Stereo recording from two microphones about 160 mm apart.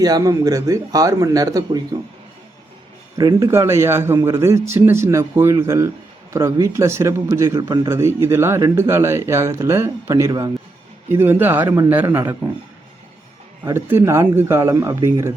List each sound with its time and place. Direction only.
0.0 s speech: 25° right (ahead or behind)
3.2 s speech: 20° right (ahead or behind)
13.7 s speech: 15° right (ahead or behind)